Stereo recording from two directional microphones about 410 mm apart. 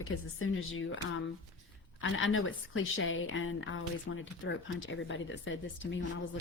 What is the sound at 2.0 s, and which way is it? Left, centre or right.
A woman's voice, left.